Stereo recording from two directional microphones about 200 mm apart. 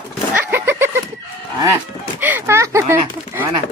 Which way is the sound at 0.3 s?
10° right (ahead or behind).